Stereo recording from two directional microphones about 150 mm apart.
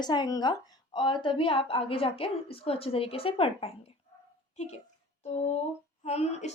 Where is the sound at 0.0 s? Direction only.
30° left (ahead or behind).